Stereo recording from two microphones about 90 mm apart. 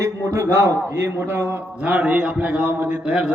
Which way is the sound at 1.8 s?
15° right (ahead or behind).